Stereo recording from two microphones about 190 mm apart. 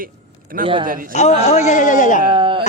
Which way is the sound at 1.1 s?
35° left (ahead or behind).